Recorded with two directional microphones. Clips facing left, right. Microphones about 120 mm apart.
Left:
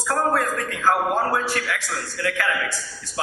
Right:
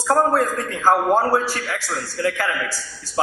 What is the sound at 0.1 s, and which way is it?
A man's voice, 30° right (ahead or behind).